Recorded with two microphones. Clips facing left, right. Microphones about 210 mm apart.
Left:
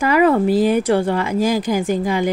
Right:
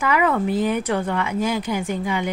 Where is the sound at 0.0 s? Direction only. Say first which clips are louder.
Left 6 dB; 35° left (ahead or behind).